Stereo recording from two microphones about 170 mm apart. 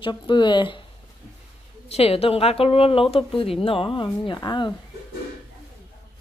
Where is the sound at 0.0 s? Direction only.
25° left (ahead or behind).